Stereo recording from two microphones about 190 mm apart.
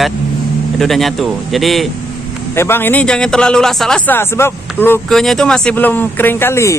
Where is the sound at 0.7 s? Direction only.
Centre (ahead or behind).